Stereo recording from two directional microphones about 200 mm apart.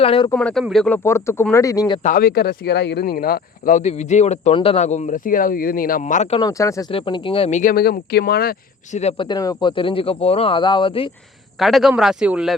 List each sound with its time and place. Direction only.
0.0 s speech: 30° left (ahead or behind)
0.3 s speech: 5° left (ahead or behind)
2.0 s speech: 45° left (ahead or behind)
6.4 s speech: 15° left (ahead or behind)
6.9 s speech: 25° left (ahead or behind); by 9.0 s 50° left (ahead or behind)
9.0 s speech: 30° left (ahead or behind)
11.6 s speech: centre (ahead or behind)